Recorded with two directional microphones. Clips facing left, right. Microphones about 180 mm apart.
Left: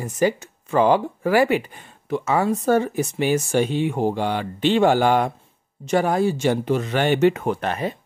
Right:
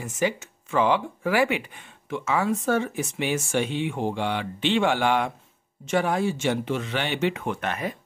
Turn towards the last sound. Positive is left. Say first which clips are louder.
# left 5 dB
turn(degrees=30)  # may be behind; listen again after turning